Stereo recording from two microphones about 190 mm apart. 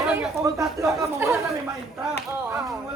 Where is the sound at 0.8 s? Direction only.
15° right (ahead or behind).